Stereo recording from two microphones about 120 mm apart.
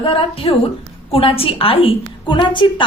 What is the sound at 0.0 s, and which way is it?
A woman's voice, 50° left (ahead or behind).